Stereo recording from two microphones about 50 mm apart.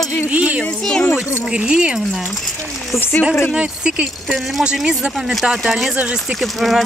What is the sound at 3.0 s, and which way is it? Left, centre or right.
Speech, left.